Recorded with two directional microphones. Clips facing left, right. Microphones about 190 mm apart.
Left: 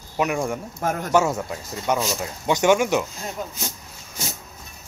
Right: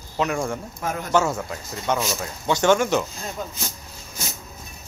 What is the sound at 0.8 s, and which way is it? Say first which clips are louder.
Speech: left 5 dB; 45° left (ahead or behind).